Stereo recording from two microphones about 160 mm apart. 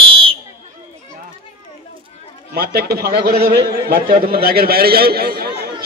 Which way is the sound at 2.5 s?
75° right (ahead or behind).